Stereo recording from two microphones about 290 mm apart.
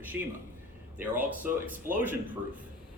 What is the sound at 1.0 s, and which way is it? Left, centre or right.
A man's voice, centre.